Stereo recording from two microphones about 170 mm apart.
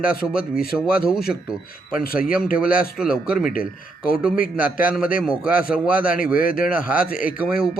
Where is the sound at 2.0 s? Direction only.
60° left (ahead or behind).